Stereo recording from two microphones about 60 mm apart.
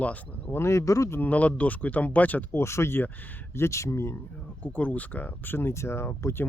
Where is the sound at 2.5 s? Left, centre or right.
Left.